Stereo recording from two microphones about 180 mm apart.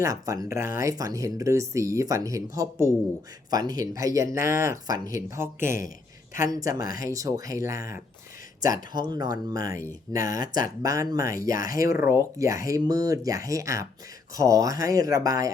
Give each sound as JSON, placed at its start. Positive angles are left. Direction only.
{"t": 0.0, "sound": "speech", "side_deg": -20}
{"t": 6.8, "sound": "speech", "side_deg": 50}
{"t": 7.1, "sound": "speech", "side_deg": -20}
{"t": 11.5, "sound": "speech", "side_deg": 50}
{"t": 11.8, "sound": "speech", "side_deg": -15}